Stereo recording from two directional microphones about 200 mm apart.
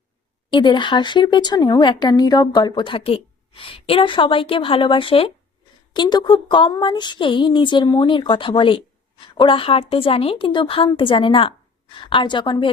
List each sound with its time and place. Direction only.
0.5 s speech: 20° left (ahead or behind)